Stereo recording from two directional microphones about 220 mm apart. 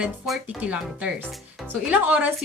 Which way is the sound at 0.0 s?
5° right (ahead or behind).